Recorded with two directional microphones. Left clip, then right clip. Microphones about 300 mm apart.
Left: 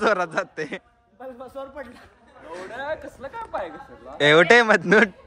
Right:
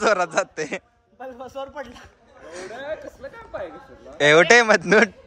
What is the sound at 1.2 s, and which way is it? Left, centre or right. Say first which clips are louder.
Speech: right 2 dB; right.